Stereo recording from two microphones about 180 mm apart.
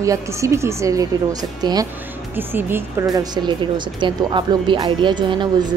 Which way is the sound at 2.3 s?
10° right (ahead or behind).